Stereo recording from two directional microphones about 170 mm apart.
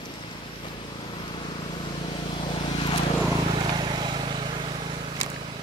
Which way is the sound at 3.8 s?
25° right (ahead or behind).